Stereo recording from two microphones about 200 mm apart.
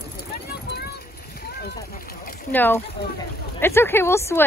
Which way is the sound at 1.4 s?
50° left (ahead or behind).